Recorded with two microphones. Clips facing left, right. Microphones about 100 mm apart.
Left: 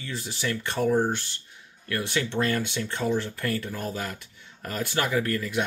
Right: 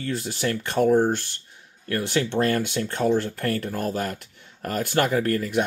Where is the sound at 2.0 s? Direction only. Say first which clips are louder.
Right 4 dB; 50° right (ahead or behind).